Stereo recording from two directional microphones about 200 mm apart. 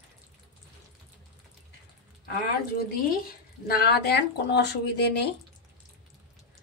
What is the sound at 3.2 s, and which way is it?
Speech, 50° left (ahead or behind).